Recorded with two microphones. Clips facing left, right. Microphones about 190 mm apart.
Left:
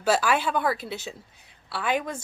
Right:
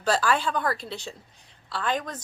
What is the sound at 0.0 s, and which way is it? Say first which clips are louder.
A woman's voice: left 1 dB; 5° left (ahead or behind).